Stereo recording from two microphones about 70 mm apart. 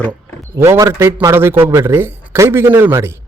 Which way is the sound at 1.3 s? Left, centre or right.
Right.